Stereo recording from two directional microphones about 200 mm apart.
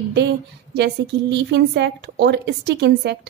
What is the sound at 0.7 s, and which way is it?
A woman's voice, 60° right (ahead or behind).